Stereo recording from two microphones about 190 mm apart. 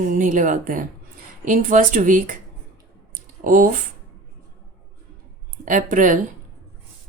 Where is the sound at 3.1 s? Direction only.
45° right (ahead or behind).